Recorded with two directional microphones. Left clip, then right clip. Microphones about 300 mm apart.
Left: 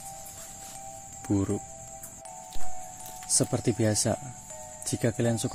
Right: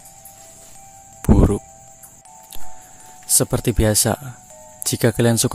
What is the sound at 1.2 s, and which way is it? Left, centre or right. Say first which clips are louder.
Speech: right 10 dB; right.